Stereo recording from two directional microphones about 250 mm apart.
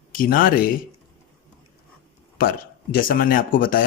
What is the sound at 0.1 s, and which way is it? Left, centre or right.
Speech, left.